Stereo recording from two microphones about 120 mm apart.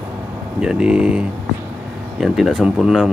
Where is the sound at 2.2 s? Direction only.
Centre (ahead or behind).